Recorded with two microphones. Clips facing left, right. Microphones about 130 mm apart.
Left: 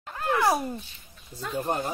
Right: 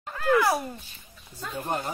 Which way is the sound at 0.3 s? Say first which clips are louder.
Right 2 dB; 25° left (ahead or behind).